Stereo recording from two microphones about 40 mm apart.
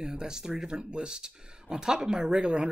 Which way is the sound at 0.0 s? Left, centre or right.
Centre.